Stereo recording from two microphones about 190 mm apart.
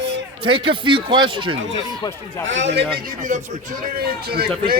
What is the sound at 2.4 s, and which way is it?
Speech, 75° right (ahead or behind).